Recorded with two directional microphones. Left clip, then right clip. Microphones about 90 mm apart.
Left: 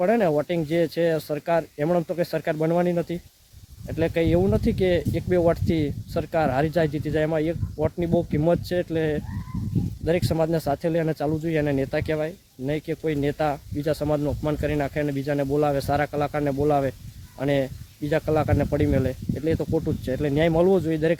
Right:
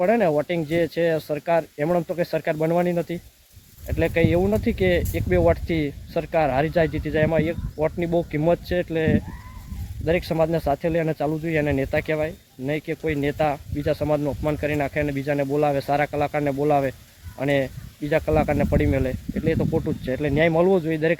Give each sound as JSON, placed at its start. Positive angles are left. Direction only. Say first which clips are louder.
{"t": 0.0, "sound": "speech", "louder": "right 1 dB", "side_deg": 10}